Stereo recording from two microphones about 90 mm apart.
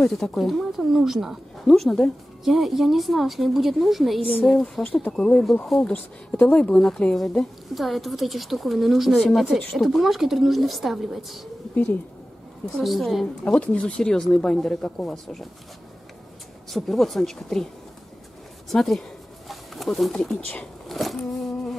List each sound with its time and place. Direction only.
0.0 s speech: 5° left (ahead or behind)
11.7 s speech: 20° left (ahead or behind)
12.7 s speech: centre (ahead or behind)
16.7 s speech: centre (ahead or behind)
18.7 s bird: 5° left (ahead or behind)